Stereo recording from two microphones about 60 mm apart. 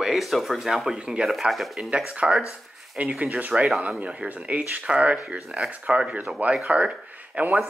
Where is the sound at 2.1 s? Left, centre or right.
Centre.